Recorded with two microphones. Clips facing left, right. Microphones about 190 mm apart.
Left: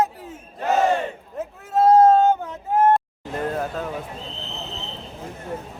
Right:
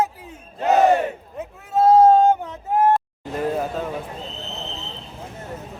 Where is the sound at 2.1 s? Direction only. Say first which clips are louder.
Right 1 dB; 15° right (ahead or behind).